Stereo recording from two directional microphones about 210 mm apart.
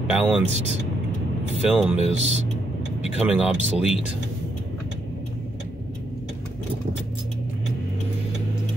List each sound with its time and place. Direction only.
0.0 s speech: 5° right (ahead or behind)
1.6 s speech: 5° right (ahead or behind)
2.0 s speech: 30° right (ahead or behind)
3.0 s speech: 5° right (ahead or behind)